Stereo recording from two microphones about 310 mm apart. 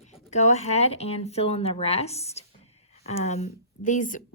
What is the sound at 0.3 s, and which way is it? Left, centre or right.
Speech, left.